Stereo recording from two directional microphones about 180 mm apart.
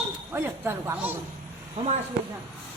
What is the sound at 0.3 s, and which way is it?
Speech, 10° right (ahead or behind).